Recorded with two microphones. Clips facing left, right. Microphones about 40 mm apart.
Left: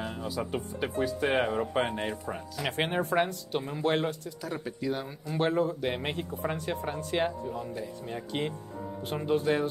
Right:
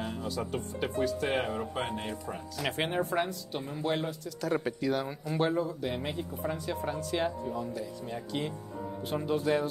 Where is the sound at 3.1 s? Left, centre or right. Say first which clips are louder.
Left 4 dB; left.